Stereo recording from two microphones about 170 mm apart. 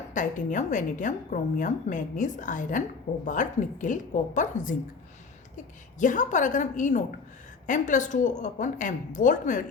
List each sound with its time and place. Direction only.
0.1 s a woman's voice: 45° left (ahead or behind)
6.0 s a woman's voice: 45° left (ahead or behind)